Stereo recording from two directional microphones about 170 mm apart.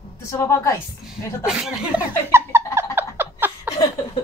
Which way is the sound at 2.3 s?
15° right (ahead or behind).